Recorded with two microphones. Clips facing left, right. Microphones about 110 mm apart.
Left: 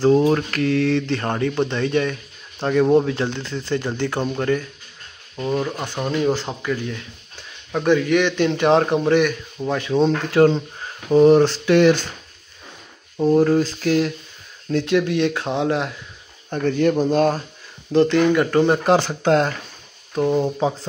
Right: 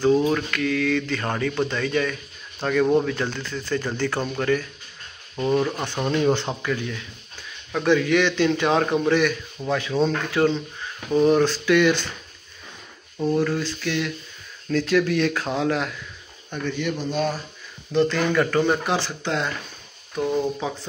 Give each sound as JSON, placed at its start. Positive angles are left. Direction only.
{"t": 0.0, "sound": "speech", "side_deg": 35}
{"t": 5.3, "sound": "a man's voice", "side_deg": 0}
{"t": 10.3, "sound": "a sound", "side_deg": 40}
{"t": 11.1, "sound": "speech", "side_deg": 25}
{"t": 13.3, "sound": "a sound", "side_deg": 40}
{"t": 14.7, "sound": "speech", "side_deg": 25}
{"t": 16.4, "sound": "speech", "side_deg": 40}
{"t": 18.0, "sound": "speech", "side_deg": 20}
{"t": 18.9, "sound": "speech", "side_deg": 50}
{"t": 20.2, "sound": "speech", "side_deg": 20}